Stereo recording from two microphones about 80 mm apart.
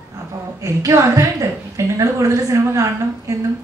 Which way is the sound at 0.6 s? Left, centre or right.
Right.